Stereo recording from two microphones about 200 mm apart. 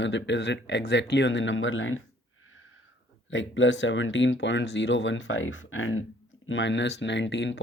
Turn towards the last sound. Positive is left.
turn(degrees=65)  # may be behind; listen again after turning